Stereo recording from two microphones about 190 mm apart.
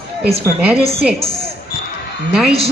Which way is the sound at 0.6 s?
Centre (ahead or behind).